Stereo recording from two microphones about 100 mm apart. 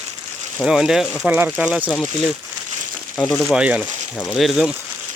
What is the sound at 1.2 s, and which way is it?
Speech, 20° right (ahead or behind).